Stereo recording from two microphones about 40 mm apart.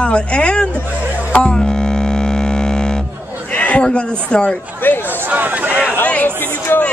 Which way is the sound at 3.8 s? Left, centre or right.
Left.